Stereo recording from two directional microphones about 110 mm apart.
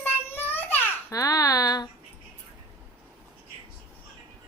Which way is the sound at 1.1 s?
30° left (ahead or behind).